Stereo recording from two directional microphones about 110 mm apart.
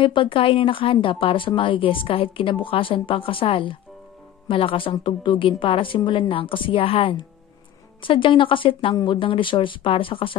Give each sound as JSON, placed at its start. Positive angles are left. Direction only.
{"t": 0.0, "sound": "a woman's voice", "side_deg": 50}